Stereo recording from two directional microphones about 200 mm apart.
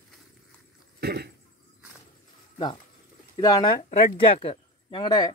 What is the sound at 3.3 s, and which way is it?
Speech, 20° left (ahead or behind).